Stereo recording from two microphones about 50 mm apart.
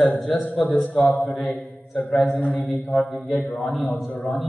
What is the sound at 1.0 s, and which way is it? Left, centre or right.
Mantra, left.